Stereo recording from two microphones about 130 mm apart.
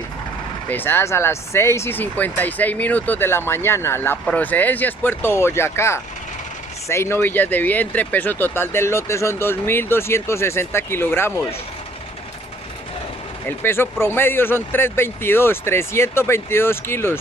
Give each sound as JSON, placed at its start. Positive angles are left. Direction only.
{"t": 0.7, "sound": "speech", "side_deg": 15}
{"t": 13.5, "sound": "speech", "side_deg": 15}